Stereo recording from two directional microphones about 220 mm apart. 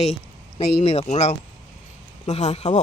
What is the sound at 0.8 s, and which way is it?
Speech, 30° left (ahead or behind).